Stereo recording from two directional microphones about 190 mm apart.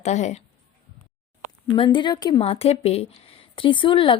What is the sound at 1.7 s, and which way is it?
Speech, 25° left (ahead or behind).